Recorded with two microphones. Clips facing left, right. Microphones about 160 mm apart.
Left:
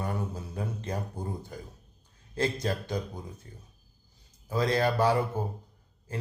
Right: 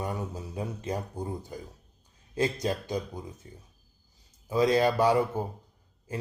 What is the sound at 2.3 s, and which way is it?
Speech, 15° right (ahead or behind).